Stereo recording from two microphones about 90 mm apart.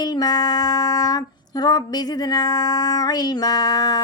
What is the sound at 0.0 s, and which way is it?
Female singing, 50° left (ahead or behind).